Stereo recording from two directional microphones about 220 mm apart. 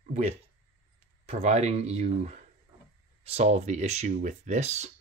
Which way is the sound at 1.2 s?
30° right (ahead or behind).